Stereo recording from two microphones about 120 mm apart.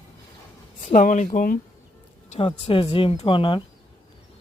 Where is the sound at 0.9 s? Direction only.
90° left.